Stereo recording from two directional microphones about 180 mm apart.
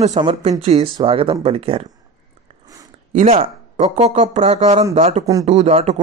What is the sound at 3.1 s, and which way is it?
Speech, 40° right (ahead or behind).